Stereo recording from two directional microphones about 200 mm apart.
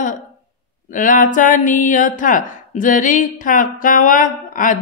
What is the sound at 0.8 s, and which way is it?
Speech, 40° left (ahead or behind).